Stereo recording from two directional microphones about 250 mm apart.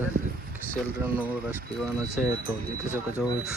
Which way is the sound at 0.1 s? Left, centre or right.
Right.